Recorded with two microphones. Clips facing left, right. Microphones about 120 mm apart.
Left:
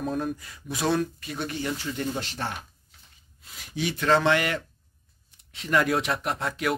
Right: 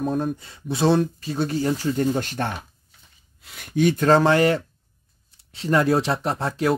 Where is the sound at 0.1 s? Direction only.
30° right (ahead or behind).